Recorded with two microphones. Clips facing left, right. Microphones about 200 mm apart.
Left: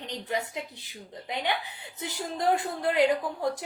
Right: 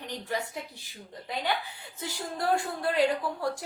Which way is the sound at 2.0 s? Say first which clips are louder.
Left 2 dB; 20° left (ahead or behind).